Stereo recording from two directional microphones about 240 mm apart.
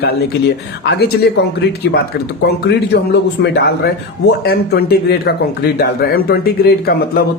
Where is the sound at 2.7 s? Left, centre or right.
Left.